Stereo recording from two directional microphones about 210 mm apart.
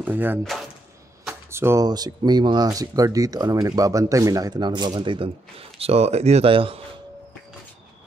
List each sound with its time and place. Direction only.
0.0 s speech: 10° right (ahead or behind)
1.5 s speech: 10° right (ahead or behind)